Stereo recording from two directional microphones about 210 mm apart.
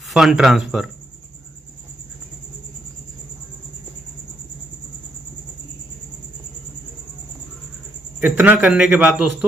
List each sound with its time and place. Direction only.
0.1 s a man's voice: centre (ahead or behind)
8.2 s a man's voice: 5° right (ahead or behind)